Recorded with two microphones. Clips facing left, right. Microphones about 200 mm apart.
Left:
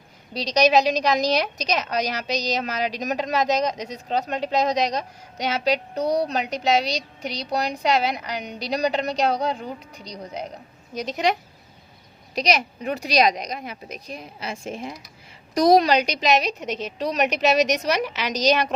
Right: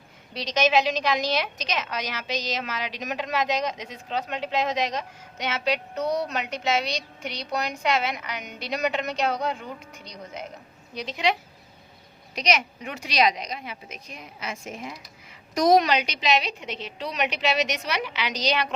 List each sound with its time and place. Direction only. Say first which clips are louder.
0.3 s a woman's voice: left 4 dB; 40° left (ahead or behind)